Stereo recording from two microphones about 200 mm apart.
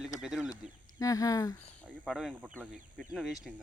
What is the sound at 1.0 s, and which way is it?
Speech, 20° left (ahead or behind).